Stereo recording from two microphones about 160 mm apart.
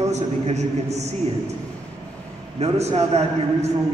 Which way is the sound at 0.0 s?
45° right (ahead or behind).